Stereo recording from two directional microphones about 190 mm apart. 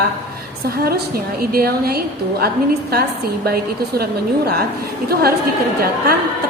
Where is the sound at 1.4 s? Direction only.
50° right (ahead or behind).